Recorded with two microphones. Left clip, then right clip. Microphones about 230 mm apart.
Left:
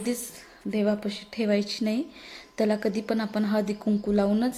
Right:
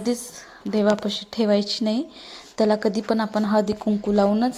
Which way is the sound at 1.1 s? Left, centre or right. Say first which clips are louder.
Right 5 dB; centre.